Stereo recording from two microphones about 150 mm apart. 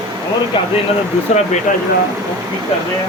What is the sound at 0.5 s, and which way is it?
Speech, 35° left (ahead or behind).